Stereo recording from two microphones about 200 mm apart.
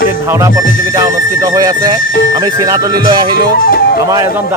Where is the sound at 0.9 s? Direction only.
15° right (ahead or behind).